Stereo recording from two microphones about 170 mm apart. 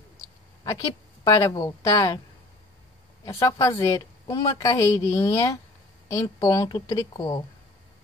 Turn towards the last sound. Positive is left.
turn(degrees=20)  # may be behind; listen again after turning